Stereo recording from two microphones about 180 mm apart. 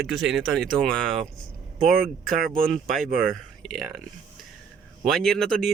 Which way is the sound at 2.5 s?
5° left (ahead or behind).